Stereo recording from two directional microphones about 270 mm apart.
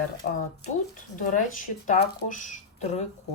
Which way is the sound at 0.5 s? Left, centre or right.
Left.